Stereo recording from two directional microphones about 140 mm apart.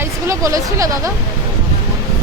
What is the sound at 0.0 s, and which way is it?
Speech, 20° right (ahead or behind).